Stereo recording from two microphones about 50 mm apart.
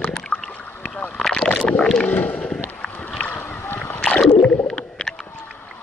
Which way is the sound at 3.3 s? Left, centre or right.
Left.